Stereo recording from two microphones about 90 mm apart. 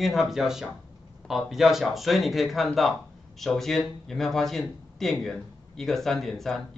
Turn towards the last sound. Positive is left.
turn(degrees=5)  # may be behind; listen again after turning